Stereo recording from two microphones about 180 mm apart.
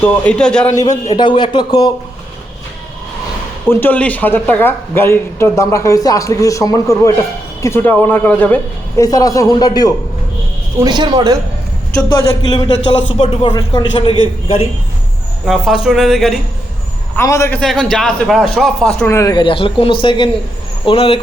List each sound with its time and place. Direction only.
0.0 s a man's voice: 5° left (ahead or behind)
1.0 s speech: 25° left (ahead or behind)
3.7 s a man's voice: 10° left (ahead or behind)
9.0 s speech: 20° left (ahead or behind)
10.8 s speech: 25° right (ahead or behind)
12.0 s speech: 25° left (ahead or behind)
15.4 s speech: centre (ahead or behind)
17.2 s a man's voice: 15° left (ahead or behind)
17.6 s speech: 5° left (ahead or behind); by 21.2 s 30° left (ahead or behind)